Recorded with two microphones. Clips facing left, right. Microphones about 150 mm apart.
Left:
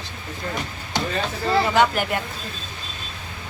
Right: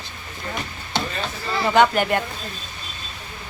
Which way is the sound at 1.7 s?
5° left (ahead or behind).